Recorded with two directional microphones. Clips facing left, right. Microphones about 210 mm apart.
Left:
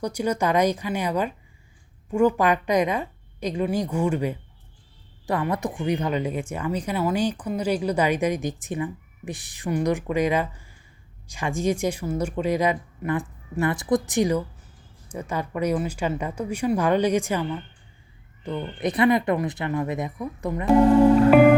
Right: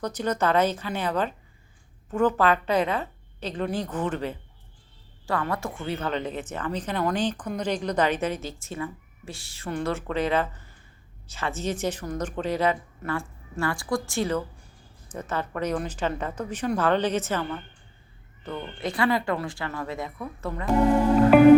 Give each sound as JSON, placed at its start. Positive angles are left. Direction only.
{"t": 0.0, "sound": "speech", "side_deg": 10}